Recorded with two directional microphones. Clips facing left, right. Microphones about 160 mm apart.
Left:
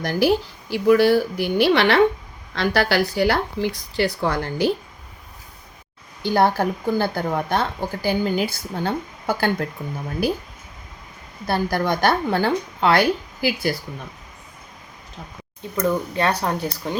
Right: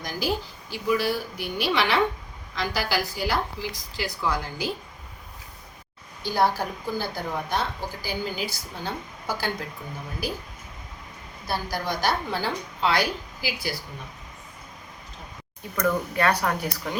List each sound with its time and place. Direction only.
0.0 s speech: 65° left (ahead or behind)
6.2 s speech: 60° left (ahead or behind)
11.4 s speech: 60° left (ahead or behind)
15.7 s speech: 25° left (ahead or behind)